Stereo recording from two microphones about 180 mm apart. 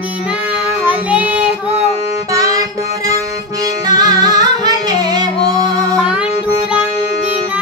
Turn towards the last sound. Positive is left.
turn(degrees=-20)  # may be behind; listen again after turning